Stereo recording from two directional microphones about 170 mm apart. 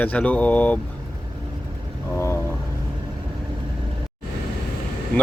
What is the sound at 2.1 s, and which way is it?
Vehicle, 15° left (ahead or behind).